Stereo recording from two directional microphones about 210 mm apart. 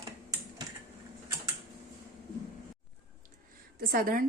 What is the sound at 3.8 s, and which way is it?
Speech, 45° right (ahead or behind).